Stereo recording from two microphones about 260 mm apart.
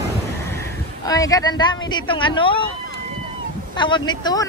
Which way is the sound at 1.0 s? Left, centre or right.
Centre.